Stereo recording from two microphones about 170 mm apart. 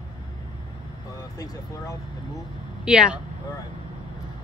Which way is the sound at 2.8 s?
5° right (ahead or behind).